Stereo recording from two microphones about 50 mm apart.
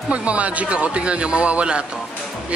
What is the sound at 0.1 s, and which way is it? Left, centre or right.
Speech, right.